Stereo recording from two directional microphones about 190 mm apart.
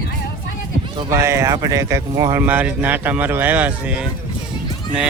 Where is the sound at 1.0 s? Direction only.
15° right (ahead or behind).